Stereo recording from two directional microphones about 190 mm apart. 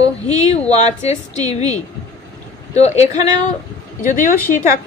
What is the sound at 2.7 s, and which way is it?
Speech, 35° left (ahead or behind).